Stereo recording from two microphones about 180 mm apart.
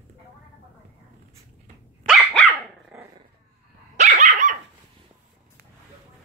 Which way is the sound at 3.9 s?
40° right (ahead or behind).